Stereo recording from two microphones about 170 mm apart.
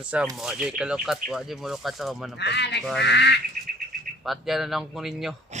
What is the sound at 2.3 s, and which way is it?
Speech, 85° left.